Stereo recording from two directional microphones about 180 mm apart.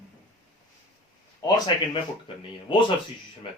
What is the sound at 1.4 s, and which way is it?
Speech, 25° left (ahead or behind).